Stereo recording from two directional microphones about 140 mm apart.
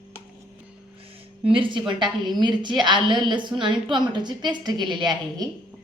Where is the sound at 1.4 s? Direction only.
40° right (ahead or behind).